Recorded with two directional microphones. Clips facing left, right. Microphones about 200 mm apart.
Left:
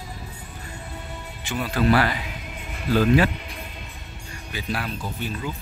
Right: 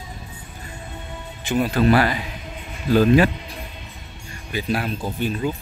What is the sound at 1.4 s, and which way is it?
Speech, 20° right (ahead or behind).